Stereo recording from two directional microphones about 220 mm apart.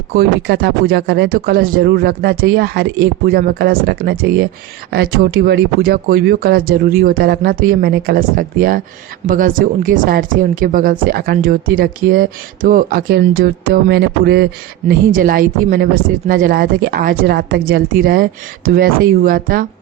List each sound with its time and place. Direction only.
0.2 s a woman's voice: 45° right (ahead or behind)